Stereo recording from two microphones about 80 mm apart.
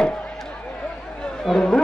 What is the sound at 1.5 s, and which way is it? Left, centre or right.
Speech, centre.